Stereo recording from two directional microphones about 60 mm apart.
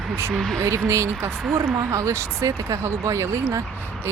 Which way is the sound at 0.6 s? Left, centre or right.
Right.